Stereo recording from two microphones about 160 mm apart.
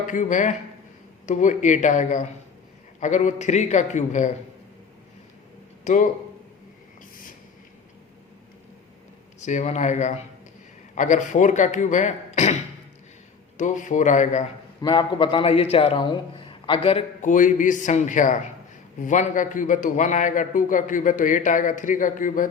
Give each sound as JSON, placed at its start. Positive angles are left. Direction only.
{"t": 0.1, "sound": "a man's voice", "side_deg": 55}
{"t": 5.8, "sound": "speech", "side_deg": 55}
{"t": 9.4, "sound": "a man's voice", "side_deg": 45}
{"t": 13.6, "sound": "a man's voice", "side_deg": 50}
{"t": 14.8, "sound": "a man's voice", "side_deg": 30}
{"t": 17.2, "sound": "a man's voice", "side_deg": 55}